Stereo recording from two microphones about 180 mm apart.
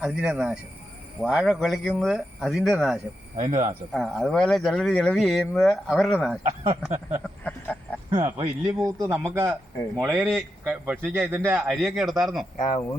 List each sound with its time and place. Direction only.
0.0 s a man's voice: 5° right (ahead or behind)
3.3 s speech: 45° right (ahead or behind)
3.9 s speech: centre (ahead or behind)
8.1 s a man's voice: 25° right (ahead or behind); by 12.5 s centre (ahead or behind)
12.5 s speech: 45° left (ahead or behind)